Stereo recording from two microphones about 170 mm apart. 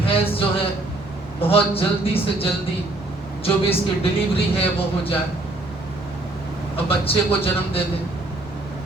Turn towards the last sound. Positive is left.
turn(degrees=35)  # may be behind; listen again after turning